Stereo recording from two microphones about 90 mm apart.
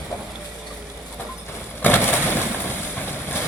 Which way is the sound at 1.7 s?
20° left (ahead or behind).